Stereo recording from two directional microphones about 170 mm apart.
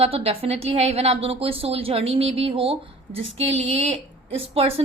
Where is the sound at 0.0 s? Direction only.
35° right (ahead or behind).